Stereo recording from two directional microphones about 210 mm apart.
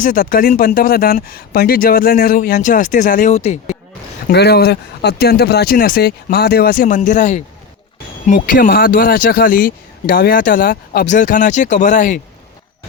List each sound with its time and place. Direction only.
0.0 s speech: 40° left (ahead or behind)
4.3 s speech: 50° left (ahead or behind)